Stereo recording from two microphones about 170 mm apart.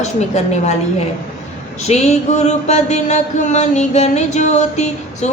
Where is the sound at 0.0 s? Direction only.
40° left (ahead or behind).